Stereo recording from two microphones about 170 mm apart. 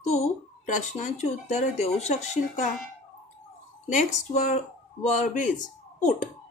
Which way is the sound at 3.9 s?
45° left (ahead or behind).